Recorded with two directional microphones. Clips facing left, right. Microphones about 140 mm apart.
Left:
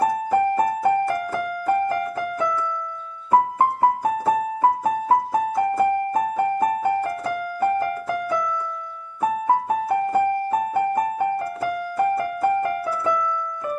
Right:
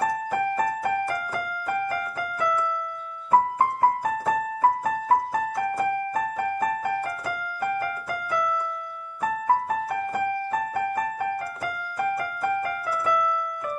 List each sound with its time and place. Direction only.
0.0 s music: 25° left (ahead or behind)
3.3 s keyboard: 25° left (ahead or behind)